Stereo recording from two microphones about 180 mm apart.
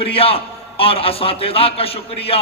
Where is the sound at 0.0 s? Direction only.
30° left (ahead or behind).